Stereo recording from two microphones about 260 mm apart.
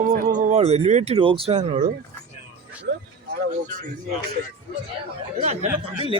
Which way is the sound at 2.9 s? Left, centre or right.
Right.